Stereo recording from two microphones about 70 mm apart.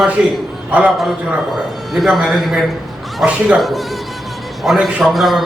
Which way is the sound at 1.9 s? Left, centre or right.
Centre.